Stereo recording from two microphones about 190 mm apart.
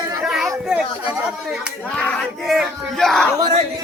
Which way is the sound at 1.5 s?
5° left (ahead or behind).